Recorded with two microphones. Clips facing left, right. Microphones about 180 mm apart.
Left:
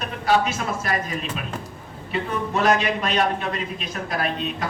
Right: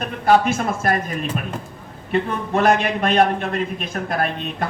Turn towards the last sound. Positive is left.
turn(degrees=-50)  # may be behind; listen again after turning